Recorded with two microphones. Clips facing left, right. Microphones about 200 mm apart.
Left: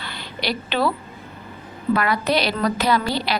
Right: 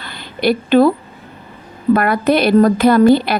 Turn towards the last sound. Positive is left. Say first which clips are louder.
# right 11 dB
turn(degrees=-55)  # may be behind; listen again after turning